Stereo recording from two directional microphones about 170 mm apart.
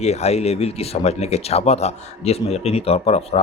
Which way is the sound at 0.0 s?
40° left (ahead or behind).